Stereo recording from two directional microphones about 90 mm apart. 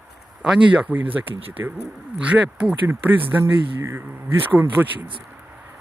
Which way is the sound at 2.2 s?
15° right (ahead or behind).